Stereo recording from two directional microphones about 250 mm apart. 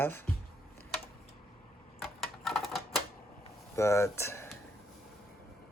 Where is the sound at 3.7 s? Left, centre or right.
Centre.